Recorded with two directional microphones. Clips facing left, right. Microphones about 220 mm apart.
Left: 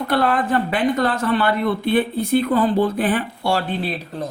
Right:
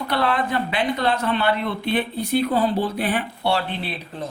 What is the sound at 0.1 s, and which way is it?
Speech, 50° left (ahead or behind).